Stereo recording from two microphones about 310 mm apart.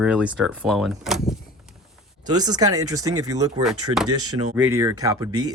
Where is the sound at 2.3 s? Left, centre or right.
Centre.